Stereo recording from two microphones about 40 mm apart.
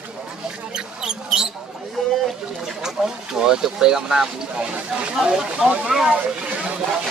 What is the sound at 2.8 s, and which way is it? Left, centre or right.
Speech, centre.